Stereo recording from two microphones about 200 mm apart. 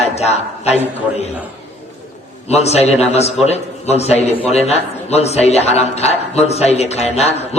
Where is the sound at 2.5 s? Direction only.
30° left (ahead or behind).